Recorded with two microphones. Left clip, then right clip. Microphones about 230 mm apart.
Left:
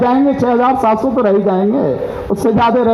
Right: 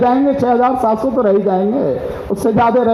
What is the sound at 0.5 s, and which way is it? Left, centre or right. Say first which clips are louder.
Speech: left 3 dB; left.